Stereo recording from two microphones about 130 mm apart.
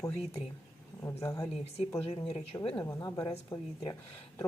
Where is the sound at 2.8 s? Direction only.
25° left (ahead or behind).